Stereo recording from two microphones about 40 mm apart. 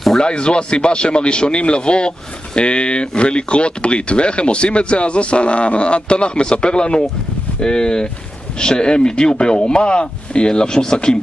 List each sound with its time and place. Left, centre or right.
0.2 s speech: left